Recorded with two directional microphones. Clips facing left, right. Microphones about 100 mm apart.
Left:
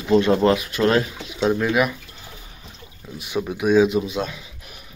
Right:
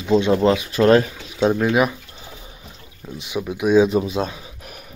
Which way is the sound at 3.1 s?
15° right (ahead or behind).